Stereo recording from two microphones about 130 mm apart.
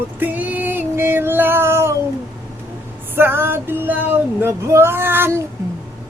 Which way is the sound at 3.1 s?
15° right (ahead or behind).